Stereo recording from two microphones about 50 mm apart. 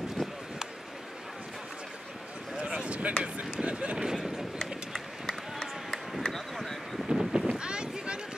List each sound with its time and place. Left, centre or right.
2.5 s a sound: right
4.0 s run: centre
4.6 s run: centre
6.1 s a sound: centre
7.1 s sheep: centre
7.4 s boat: centre